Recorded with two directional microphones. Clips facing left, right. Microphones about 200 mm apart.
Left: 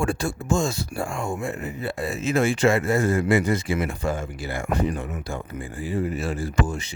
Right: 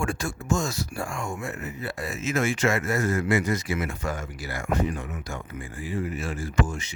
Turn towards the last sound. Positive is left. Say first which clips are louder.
# left 2 dB
turn(degrees=35)  # may be behind; listen again after turning